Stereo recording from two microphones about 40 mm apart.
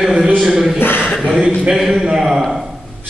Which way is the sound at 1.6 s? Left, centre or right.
Centre.